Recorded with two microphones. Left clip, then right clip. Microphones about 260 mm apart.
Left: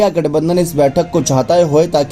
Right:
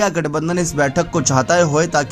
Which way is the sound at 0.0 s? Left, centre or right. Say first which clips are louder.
Left 5 dB; right.